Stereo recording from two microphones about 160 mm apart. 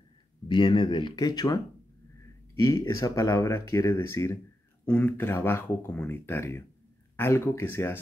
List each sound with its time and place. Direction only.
0.5 s speech: 30° left (ahead or behind); by 8.0 s 15° left (ahead or behind)